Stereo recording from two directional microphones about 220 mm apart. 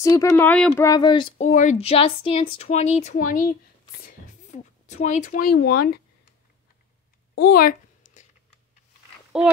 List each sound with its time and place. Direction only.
0.0 s speech: 15° left (ahead or behind)
0.8 s speech: 20° left (ahead or behind)
1.5 s speech: 35° left (ahead or behind)
4.0 s a sound: 35° left (ahead or behind)
7.3 s a sound: 45° left (ahead or behind)
9.3 s a woman's voice: 5° right (ahead or behind)